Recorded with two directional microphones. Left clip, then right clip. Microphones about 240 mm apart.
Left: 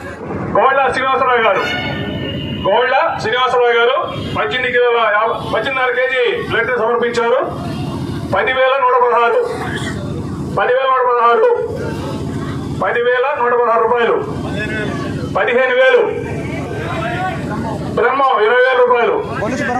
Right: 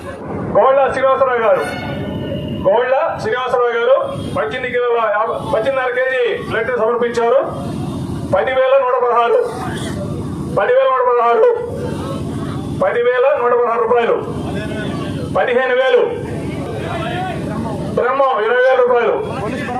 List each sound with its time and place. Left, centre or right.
0.5 s a man's voice: right
2.6 s a man's voice: right
10.5 s a sound: right
12.8 s a man's voice: right
15.4 s a man's voice: right
17.9 s a man's voice: right